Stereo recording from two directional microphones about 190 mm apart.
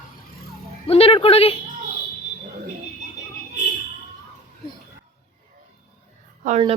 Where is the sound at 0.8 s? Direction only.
30° left (ahead or behind).